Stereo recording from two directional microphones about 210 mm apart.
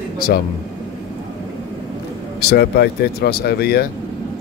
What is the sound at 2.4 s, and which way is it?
Speech, 50° left (ahead or behind).